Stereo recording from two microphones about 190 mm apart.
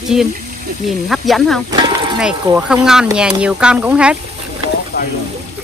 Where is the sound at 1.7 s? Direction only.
25° right (ahead or behind).